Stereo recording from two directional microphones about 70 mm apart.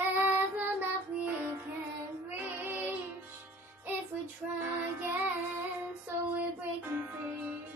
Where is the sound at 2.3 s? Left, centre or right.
Right.